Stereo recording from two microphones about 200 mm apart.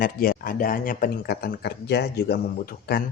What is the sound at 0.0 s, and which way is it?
Speech, 45° left (ahead or behind).